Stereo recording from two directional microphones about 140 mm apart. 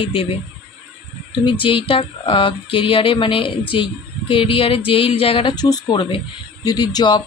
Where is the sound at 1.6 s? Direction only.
40° left (ahead or behind).